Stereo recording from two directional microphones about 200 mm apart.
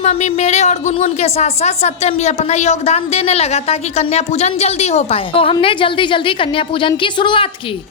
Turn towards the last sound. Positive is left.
turn(degrees=25)  # may be behind; listen again after turning